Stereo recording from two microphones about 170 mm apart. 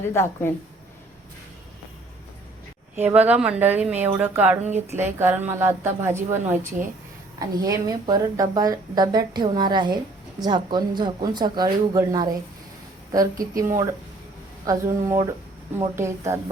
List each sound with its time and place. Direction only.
0.1 s a woman's voice: 15° left (ahead or behind)
2.9 s a woman's voice: 10° right (ahead or behind)